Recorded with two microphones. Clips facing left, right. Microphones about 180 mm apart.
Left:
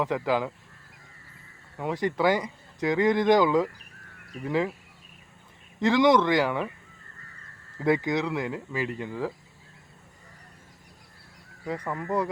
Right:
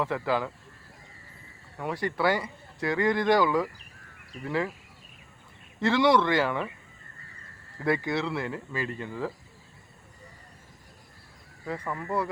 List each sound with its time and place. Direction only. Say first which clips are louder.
0.0 s speech: left 2 dB; 15° left (ahead or behind)
1.8 s speech: left 3 dB; 20° left (ahead or behind)
5.8 s speech: left 2 dB; 15° left (ahead or behind)
7.8 s speech: left 3 dB; 20° left (ahead or behind)
11.6 s speech: left 2 dB; 15° left (ahead or behind)